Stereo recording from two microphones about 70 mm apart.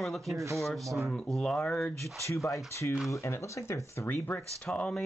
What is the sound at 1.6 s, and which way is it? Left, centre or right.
Speech, left.